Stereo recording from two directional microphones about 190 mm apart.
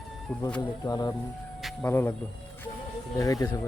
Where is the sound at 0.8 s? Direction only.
20° left (ahead or behind).